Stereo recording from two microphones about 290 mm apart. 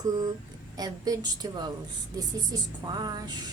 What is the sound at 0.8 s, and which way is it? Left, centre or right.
Speech, centre.